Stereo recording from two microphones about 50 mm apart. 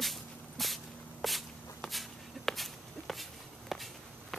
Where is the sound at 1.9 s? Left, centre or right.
Centre.